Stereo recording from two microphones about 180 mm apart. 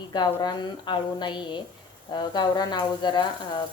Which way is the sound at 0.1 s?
25° left (ahead or behind).